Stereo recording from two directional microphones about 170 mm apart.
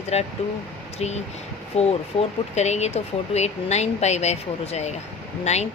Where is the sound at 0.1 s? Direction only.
40° left (ahead or behind).